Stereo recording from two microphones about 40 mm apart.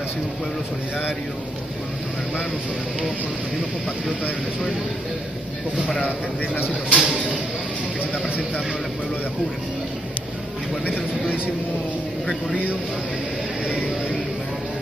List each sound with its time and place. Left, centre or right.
6.6 s speech: right